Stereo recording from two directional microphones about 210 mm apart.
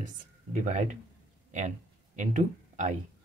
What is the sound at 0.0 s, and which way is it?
Speech, 40° right (ahead or behind).